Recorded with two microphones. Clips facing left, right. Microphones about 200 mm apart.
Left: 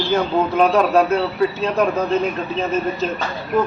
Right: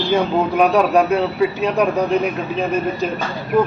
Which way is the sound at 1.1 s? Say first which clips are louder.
Right 1 dB; 15° right (ahead or behind).